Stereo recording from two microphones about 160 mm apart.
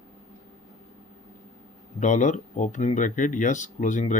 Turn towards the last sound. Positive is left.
turn(degrees=50)  # may be behind; listen again after turning